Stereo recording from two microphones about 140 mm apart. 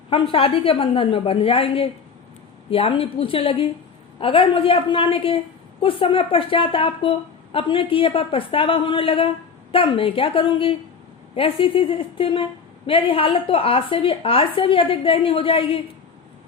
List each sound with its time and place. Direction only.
0.1 s a woman's voice: 40° left (ahead or behind)